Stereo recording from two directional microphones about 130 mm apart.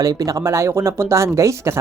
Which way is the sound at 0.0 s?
30° right (ahead or behind).